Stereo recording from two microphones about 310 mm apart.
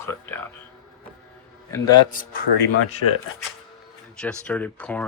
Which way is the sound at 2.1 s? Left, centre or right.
Left.